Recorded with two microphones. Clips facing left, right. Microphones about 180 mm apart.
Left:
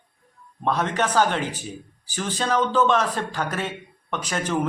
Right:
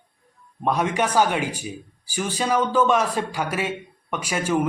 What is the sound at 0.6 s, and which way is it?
Speech, 10° right (ahead or behind).